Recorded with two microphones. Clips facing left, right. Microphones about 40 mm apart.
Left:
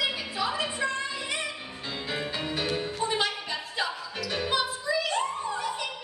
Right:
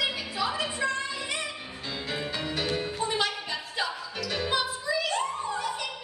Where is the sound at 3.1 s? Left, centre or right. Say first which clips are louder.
Even; centre.